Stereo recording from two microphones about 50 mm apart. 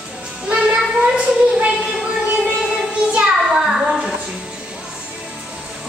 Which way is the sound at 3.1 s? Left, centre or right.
Centre.